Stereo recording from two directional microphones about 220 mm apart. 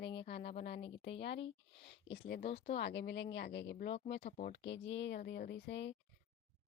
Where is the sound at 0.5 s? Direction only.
25° left (ahead or behind).